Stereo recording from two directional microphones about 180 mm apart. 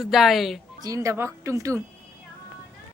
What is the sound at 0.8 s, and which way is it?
Speech, 15° right (ahead or behind).